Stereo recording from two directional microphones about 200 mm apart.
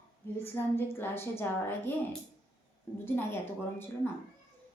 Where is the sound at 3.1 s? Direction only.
10° left (ahead or behind).